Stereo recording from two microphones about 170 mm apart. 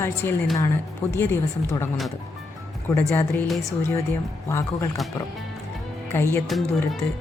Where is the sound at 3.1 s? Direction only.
10° left (ahead or behind).